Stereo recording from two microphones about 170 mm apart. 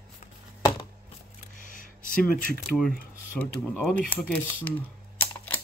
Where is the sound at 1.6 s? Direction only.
55° left (ahead or behind).